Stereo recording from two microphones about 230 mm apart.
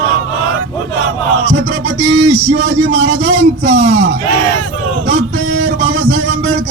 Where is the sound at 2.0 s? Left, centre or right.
Right.